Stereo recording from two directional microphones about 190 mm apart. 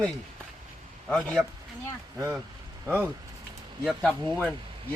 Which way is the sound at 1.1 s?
Centre (ahead or behind).